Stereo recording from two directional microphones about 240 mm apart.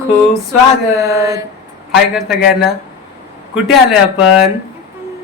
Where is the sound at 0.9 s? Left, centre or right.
Centre.